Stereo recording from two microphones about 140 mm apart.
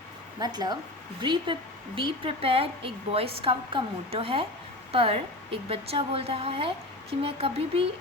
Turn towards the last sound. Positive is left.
turn(degrees=-45)  # may be behind; listen again after turning